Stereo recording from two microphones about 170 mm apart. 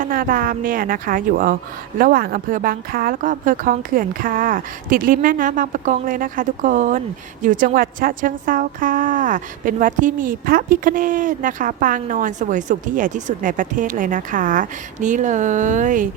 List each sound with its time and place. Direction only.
0.0 s a woman's voice: 55° right (ahead or behind)